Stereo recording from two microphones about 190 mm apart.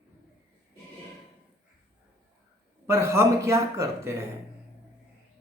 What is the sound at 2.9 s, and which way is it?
Speech, 15° right (ahead or behind).